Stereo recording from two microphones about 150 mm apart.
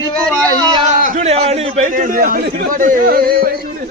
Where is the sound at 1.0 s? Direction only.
45° right (ahead or behind); by 3.5 s 85° right.